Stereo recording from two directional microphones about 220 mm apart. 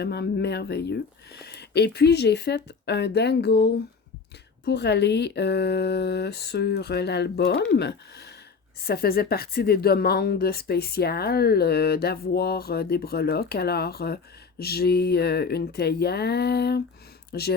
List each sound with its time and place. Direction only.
0.0 s speech: 50° left (ahead or behind)